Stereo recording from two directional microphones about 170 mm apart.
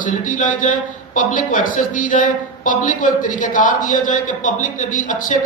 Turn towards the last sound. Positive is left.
turn(degrees=50)  # may be behind; listen again after turning